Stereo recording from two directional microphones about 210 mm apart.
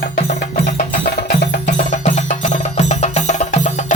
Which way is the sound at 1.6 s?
35° left (ahead or behind).